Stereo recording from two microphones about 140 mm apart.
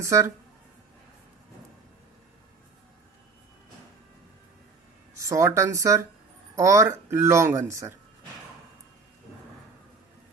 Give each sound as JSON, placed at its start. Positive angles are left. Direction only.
{"t": 0.0, "sound": "speech", "side_deg": -20}
{"t": 5.1, "sound": "speech", "side_deg": -20}